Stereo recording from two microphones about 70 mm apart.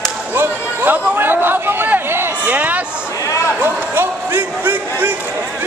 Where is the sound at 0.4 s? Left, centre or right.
Right.